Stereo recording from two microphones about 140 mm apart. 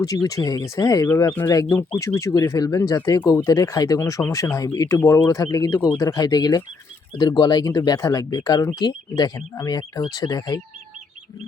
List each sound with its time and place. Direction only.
0.0 s speech: 25° left (ahead or behind)